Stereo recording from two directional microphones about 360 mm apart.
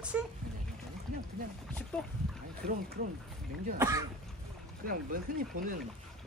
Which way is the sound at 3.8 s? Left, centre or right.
Centre.